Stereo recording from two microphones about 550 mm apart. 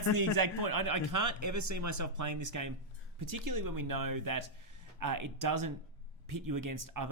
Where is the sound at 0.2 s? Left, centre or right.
Right.